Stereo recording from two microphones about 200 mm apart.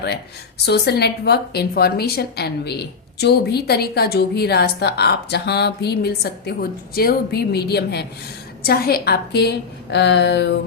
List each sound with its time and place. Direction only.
0.6 s a woman's voice: 55° left (ahead or behind)